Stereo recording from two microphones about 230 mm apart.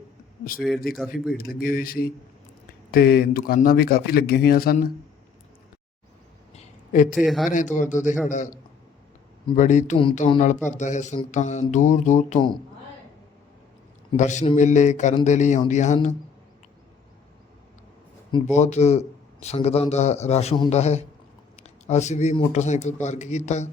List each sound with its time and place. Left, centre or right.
0.6 s a man's voice: centre
1.3 s speech: left
6.5 s a sound: left
7.2 s a man's voice: centre
7.5 s speech: left
9.6 s speech: left
14.2 s speech: left
18.5 s a man's voice: left